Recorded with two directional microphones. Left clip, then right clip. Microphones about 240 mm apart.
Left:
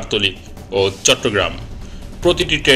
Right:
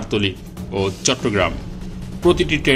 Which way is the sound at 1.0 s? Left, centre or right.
Right.